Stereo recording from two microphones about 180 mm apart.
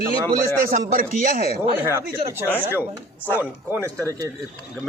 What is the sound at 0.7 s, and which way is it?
Speech, 50° right (ahead or behind).